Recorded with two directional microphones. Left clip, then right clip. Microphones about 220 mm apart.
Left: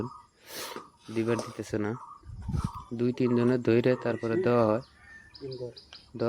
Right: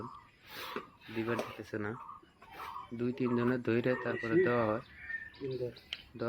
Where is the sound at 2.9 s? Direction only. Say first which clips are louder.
Left 7 dB; 45° left (ahead or behind).